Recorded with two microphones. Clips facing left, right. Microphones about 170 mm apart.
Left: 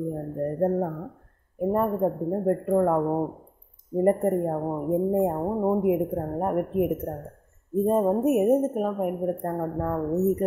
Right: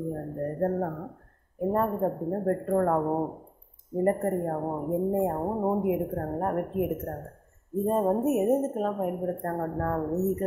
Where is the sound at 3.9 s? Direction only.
20° left (ahead or behind).